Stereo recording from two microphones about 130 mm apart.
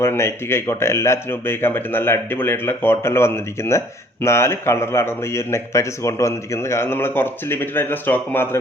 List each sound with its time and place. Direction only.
0.0 s speech: 20° left (ahead or behind)